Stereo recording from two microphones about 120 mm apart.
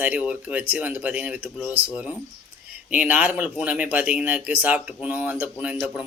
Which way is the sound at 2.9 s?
10° right (ahead or behind).